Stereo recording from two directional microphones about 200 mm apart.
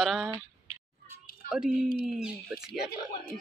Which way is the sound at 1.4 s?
5° right (ahead or behind).